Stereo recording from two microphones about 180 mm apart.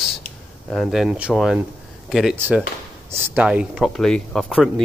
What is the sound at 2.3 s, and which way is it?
Speech, 10° right (ahead or behind).